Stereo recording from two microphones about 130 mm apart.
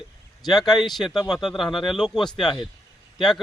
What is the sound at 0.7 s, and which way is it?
Speech, 35° left (ahead or behind).